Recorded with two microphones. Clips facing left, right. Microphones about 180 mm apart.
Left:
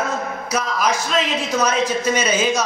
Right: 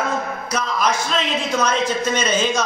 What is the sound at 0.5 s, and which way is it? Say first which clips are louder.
A man's voice: even; 5° left (ahead or behind).